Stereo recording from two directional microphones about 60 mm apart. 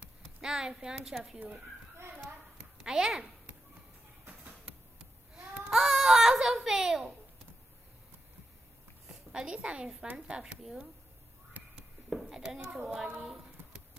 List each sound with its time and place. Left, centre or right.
0.4 s a woman's voice: centre
2.8 s a woman's voice: centre
5.3 s baby cry: centre
9.0 s a woman's voice: centre
11.6 s a sound: right
12.1 s a child's voice: centre